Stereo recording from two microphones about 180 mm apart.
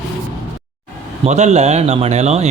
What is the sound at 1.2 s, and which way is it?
A man's voice, 40° right (ahead or behind).